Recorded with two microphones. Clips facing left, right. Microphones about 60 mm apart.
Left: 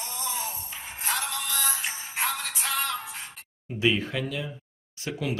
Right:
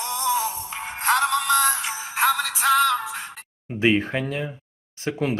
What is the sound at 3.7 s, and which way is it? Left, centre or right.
Speech, right.